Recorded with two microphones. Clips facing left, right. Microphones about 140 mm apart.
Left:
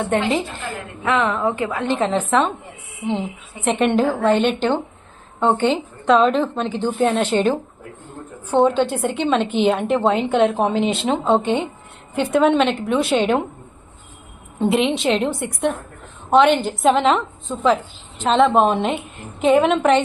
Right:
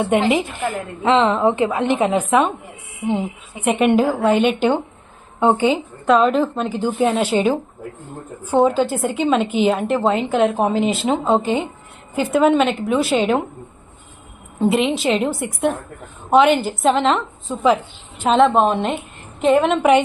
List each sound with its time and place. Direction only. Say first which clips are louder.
0.3 s a woman's voice: right 3 dB; 15° right (ahead or behind)
14.6 s a woman's voice: right 1 dB; centre (ahead or behind)
17.5 s a woman's voice: right 1 dB; 10° right (ahead or behind)